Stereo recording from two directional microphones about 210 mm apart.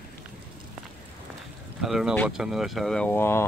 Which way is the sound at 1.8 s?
Centre (ahead or behind).